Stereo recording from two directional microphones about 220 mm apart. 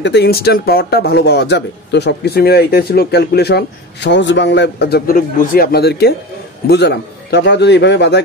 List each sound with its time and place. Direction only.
0.0 s a man's voice: 50° left (ahead or behind)